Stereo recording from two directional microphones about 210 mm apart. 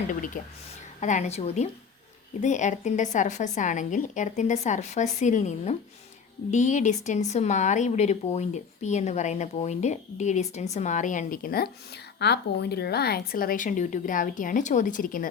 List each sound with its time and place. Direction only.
0.4 s speech: 40° left (ahead or behind)